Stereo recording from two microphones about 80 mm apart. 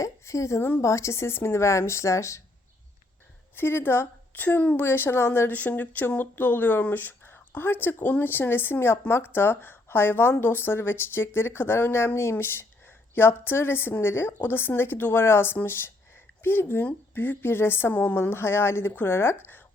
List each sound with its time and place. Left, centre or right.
0.0 s a sound: left
0.8 s speech: left
3.5 s a woman's voice: left